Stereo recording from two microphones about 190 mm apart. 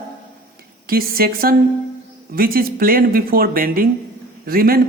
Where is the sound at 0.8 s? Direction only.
50° right (ahead or behind).